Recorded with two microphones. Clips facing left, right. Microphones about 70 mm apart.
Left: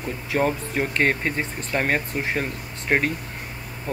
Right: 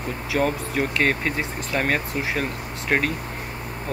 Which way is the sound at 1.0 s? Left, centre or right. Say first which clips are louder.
Left 1 dB; centre.